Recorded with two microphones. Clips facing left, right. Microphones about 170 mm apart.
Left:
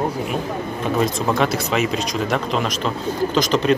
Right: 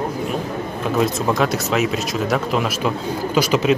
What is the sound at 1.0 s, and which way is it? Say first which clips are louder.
Speech: right 1 dB; centre (ahead or behind).